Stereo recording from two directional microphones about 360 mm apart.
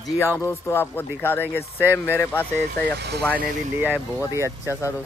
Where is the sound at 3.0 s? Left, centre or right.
Right.